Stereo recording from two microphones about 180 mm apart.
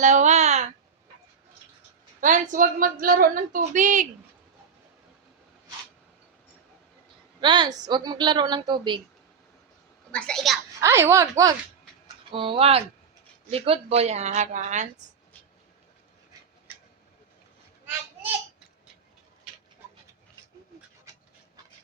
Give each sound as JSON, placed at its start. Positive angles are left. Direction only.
{"t": 0.0, "sound": "a sound", "side_deg": -40}
{"t": 2.2, "sound": "a woman's voice", "side_deg": -45}
{"t": 7.4, "sound": "a woman's voice", "side_deg": -25}
{"t": 10.1, "sound": "a child's voice", "side_deg": 5}
{"t": 10.8, "sound": "speech", "side_deg": -15}
{"t": 12.3, "sound": "speech", "side_deg": -30}